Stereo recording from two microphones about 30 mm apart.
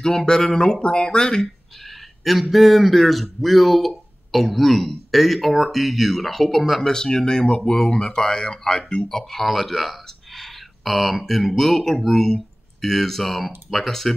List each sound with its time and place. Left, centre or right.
0.0 s speech: centre
0.7 s speech: left
1.9 s a sound: centre
2.5 s speech: centre
6.8 s speech: centre
8.6 s speech: centre